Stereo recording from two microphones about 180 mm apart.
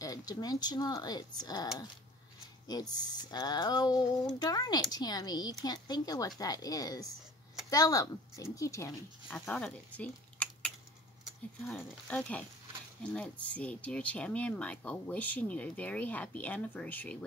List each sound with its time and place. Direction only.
0.0 s speech: 20° left (ahead or behind)
2.7 s speech: 20° left (ahead or behind)